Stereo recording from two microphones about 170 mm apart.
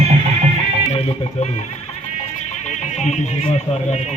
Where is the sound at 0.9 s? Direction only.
40° left (ahead or behind).